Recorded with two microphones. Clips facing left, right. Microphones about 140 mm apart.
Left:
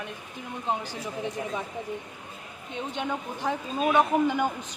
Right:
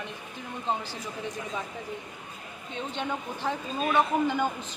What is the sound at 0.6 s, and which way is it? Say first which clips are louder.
Speech: left 1 dB; 15° left (ahead or behind).